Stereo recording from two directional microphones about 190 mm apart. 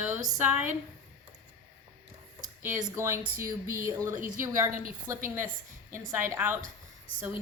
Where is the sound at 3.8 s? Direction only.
15° right (ahead or behind).